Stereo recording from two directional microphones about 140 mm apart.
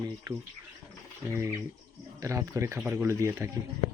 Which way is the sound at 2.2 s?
20° right (ahead or behind).